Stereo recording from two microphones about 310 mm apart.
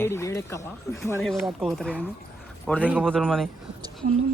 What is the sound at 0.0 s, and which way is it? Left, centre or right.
A man's voice, centre.